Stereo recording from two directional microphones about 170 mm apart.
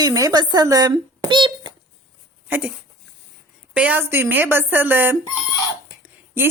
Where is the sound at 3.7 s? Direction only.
10° right (ahead or behind).